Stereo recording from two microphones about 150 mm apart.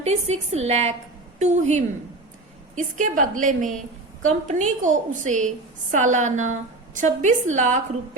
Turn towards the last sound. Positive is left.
turn(degrees=-55)  # may be behind; listen again after turning